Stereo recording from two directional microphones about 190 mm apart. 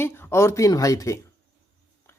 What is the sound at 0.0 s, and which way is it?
Speech, 10° left (ahead or behind).